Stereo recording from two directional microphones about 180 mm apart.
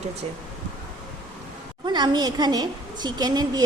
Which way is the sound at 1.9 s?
25° right (ahead or behind).